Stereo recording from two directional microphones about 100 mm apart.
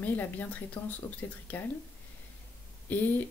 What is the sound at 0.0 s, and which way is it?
Speech, 20° left (ahead or behind).